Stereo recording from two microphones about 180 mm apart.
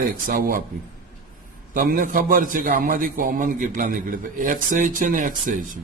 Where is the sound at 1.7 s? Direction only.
50° right (ahead or behind).